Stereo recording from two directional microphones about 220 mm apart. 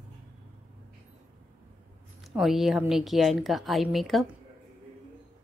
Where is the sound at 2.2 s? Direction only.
Centre (ahead or behind).